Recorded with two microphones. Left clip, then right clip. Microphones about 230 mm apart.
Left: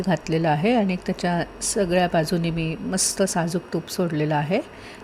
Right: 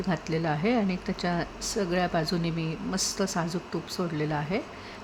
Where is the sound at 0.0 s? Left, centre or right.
Centre.